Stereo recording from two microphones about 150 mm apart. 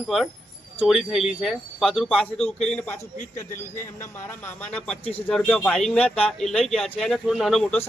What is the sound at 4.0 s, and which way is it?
Speech, 15° left (ahead or behind).